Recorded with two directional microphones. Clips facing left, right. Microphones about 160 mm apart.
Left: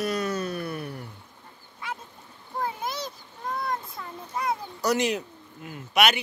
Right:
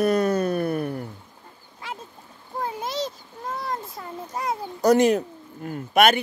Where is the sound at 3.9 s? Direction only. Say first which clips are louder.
Right 2 dB; 40° right (ahead or behind).